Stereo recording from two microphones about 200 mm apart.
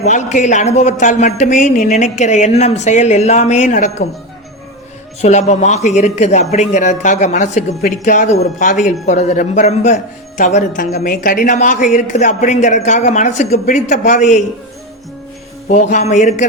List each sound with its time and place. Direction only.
0.0 s a man's voice: 35° left (ahead or behind)
5.2 s a man's voice: 35° left (ahead or behind)
15.7 s a man's voice: 35° left (ahead or behind)